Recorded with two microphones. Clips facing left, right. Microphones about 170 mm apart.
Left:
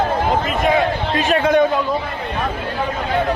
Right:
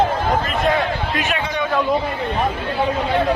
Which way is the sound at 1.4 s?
55° left (ahead or behind).